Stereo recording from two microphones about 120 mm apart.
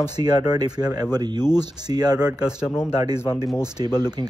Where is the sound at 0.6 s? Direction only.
35° right (ahead or behind).